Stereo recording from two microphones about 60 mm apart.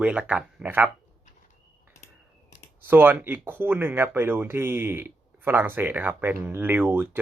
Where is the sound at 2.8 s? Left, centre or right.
Right.